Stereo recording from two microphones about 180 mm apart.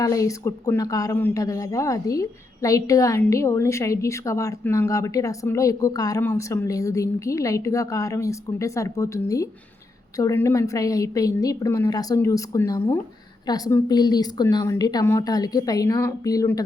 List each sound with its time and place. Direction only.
0.0 s a woman's voice: 20° left (ahead or behind)